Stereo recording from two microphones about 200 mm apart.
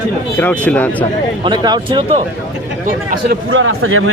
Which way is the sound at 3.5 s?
90° right.